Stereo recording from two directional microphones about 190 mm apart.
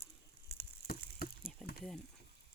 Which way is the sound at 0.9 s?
55° left (ahead or behind).